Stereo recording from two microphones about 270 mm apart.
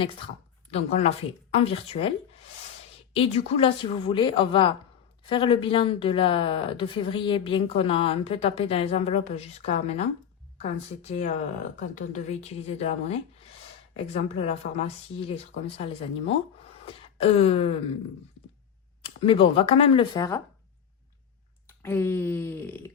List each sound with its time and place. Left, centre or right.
0.7 s speech: left
16.8 s a sound: left
19.0 s speech: centre
21.8 s speech: centre